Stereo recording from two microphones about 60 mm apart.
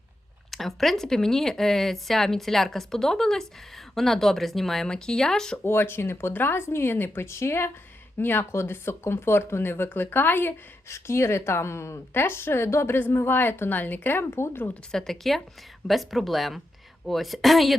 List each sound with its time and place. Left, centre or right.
0.5 s speech: centre
5.6 s speech: left
7.3 s speech: left
10.8 s speech: left
14.9 s speech: centre